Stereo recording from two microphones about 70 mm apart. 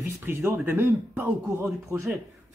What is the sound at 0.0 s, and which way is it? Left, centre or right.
Speech, right.